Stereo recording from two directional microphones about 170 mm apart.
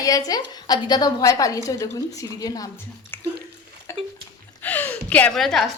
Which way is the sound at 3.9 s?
15° left (ahead or behind).